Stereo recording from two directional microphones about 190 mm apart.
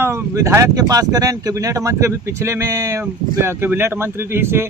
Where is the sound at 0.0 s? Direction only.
15° right (ahead or behind).